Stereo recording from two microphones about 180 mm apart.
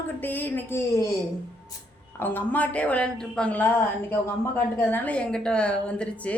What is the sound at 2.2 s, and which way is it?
A woman's voice, 10° left (ahead or behind).